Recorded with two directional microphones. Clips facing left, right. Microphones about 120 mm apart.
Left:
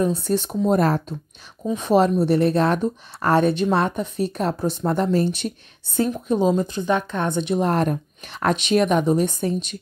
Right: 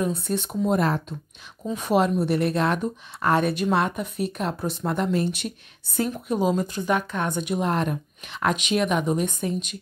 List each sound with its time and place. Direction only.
0.0 s speech: 30° left (ahead or behind)
1.6 s a woman's voice: 25° left (ahead or behind)
7.6 s speech: 40° left (ahead or behind)